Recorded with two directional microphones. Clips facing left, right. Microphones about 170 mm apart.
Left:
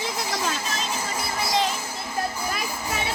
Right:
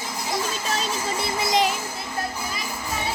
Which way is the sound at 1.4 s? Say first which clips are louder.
Right 3 dB; 15° right (ahead or behind).